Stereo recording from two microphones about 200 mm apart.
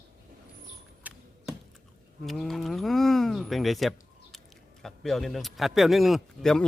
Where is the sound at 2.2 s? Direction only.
Centre (ahead or behind).